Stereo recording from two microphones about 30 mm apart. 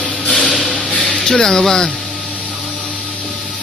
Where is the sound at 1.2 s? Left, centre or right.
Centre.